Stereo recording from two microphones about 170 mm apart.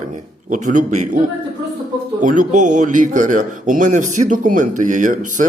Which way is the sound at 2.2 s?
50° right (ahead or behind).